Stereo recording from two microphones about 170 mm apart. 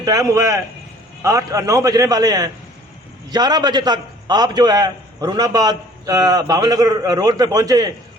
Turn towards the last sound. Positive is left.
turn(degrees=-20)  # may be behind; listen again after turning